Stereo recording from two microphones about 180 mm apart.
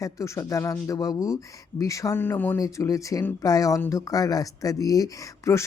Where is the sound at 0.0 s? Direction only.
20° left (ahead or behind).